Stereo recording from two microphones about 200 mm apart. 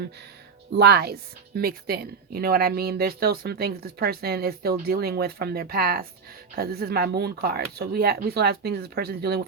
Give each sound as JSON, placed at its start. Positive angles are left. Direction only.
{"t": 0.8, "sound": "speech", "side_deg": -55}